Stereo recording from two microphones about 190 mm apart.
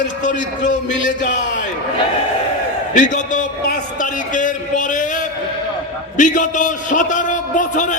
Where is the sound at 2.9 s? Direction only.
40° left (ahead or behind).